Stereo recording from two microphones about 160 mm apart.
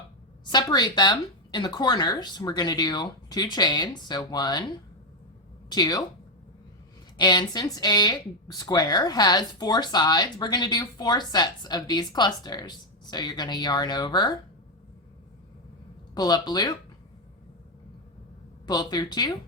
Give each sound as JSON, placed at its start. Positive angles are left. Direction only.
{"t": 0.5, "sound": "speech", "side_deg": 25}
{"t": 5.6, "sound": "speech", "side_deg": 25}
{"t": 7.2, "sound": "speech", "side_deg": 25}
{"t": 16.1, "sound": "speech", "side_deg": 25}
{"t": 18.6, "sound": "speech", "side_deg": 25}